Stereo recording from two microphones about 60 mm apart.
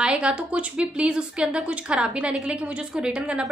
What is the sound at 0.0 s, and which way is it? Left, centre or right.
A woman's voice, centre.